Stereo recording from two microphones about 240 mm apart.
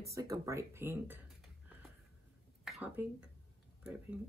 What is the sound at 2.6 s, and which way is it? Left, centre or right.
Speech, centre.